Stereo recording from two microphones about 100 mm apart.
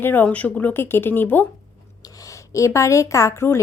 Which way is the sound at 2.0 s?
35° left (ahead or behind).